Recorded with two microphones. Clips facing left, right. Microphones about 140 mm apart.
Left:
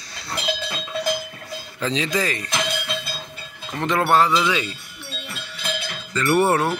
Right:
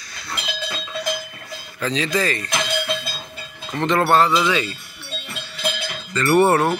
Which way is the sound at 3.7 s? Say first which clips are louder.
Right 2 dB; 10° left (ahead or behind).